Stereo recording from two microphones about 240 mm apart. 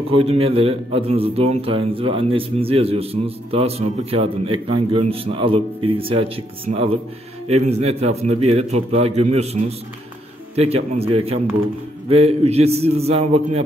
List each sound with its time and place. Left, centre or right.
0.1 s a man's voice: right